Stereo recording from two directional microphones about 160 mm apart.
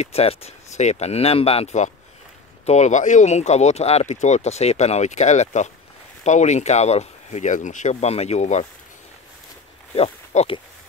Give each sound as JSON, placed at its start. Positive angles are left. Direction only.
{"t": 0.0, "sound": "speech", "side_deg": 40}
{"t": 9.9, "sound": "speech", "side_deg": 40}